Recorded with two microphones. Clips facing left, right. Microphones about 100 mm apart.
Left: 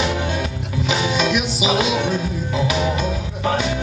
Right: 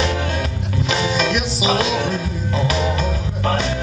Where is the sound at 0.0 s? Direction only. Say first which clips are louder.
Even; 5° left (ahead or behind).